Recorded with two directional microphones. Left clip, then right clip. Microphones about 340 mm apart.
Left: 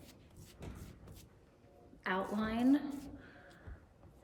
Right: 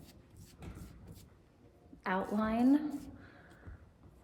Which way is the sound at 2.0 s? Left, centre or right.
Centre.